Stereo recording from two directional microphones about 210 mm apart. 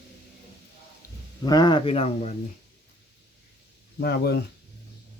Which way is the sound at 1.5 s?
20° left (ahead or behind).